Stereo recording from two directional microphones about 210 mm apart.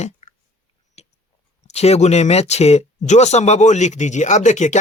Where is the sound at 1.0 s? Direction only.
30° left (ahead or behind).